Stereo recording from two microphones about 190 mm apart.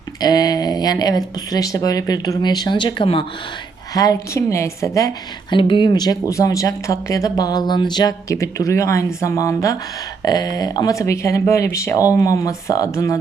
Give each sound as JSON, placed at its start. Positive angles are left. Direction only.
{"t": 0.2, "sound": "a woman's voice", "side_deg": 20}